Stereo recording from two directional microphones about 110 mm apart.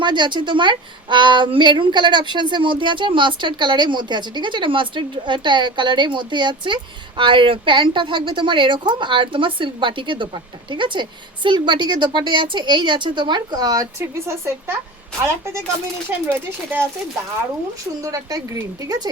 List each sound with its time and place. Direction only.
0.0 s a woman's voice: 45° right (ahead or behind)
14.0 s speech: 25° right (ahead or behind)
16.0 s speech: 20° right (ahead or behind)
18.0 s speech: 30° right (ahead or behind)